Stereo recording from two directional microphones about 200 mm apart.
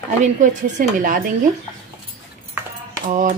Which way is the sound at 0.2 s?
40° right (ahead or behind).